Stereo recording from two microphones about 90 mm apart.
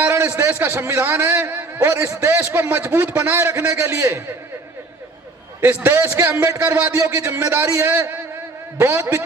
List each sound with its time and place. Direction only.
0.0 s a man's voice: 25° right (ahead or behind)
5.5 s a man's voice: 25° right (ahead or behind)